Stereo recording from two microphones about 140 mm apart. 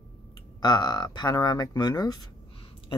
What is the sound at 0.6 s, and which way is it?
Speech, 30° left (ahead or behind).